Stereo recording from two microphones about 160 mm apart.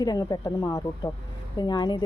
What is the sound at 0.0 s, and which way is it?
Speech, 25° left (ahead or behind).